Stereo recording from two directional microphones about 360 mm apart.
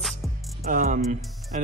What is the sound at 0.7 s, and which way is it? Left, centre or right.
Speech, right.